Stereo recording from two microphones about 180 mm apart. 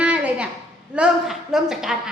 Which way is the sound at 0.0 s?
5° right (ahead or behind).